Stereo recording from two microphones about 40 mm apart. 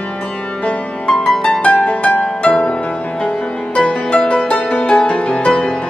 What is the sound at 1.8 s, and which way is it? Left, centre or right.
Music, left.